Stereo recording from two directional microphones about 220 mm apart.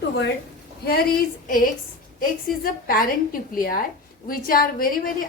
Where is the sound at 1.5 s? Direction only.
40° left (ahead or behind).